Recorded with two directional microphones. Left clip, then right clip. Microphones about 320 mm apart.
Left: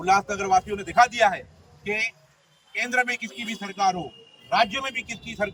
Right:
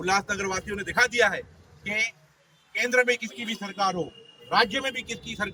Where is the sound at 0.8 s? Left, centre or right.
Centre.